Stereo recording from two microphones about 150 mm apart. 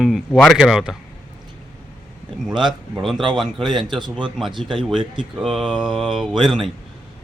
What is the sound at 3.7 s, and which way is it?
Speech, 30° right (ahead or behind).